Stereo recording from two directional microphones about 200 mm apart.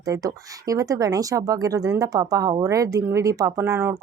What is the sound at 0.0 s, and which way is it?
Speech, 15° right (ahead or behind).